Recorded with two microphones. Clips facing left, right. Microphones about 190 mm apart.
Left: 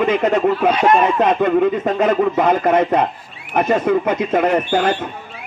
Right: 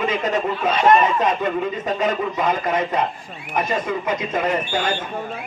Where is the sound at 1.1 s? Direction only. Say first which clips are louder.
Left 6 dB; 60° left (ahead or behind).